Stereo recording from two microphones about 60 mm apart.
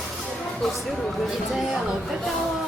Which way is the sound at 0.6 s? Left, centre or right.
Centre.